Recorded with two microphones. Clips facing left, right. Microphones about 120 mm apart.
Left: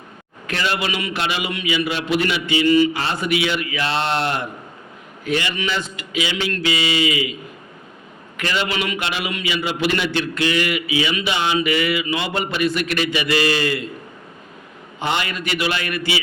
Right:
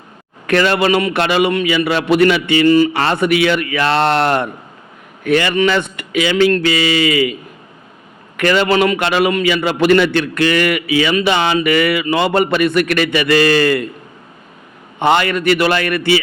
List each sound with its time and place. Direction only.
0.4 s a man's voice: 60° right (ahead or behind)
3.0 s a man's voice: 60° right (ahead or behind)
8.4 s a man's voice: 55° right (ahead or behind)
14.9 s a man's voice: 60° right (ahead or behind)